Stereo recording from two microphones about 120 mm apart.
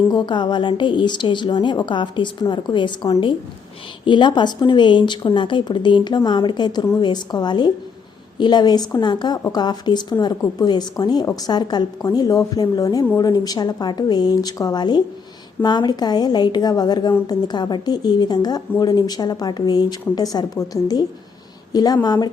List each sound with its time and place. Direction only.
0.1 s speech: 40° left (ahead or behind)